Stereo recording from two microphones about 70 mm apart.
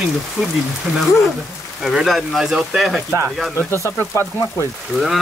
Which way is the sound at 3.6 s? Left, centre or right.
Left.